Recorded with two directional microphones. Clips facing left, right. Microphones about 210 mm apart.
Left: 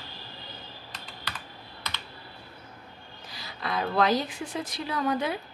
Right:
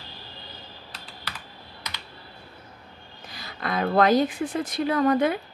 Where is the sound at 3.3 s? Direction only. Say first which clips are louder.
Right 3 dB; 50° right (ahead or behind).